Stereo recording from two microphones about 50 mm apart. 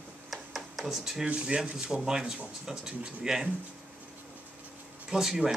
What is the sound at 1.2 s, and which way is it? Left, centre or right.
Speech, right.